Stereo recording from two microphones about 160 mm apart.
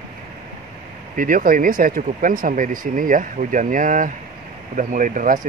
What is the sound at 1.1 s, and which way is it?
Speech, 60° right (ahead or behind).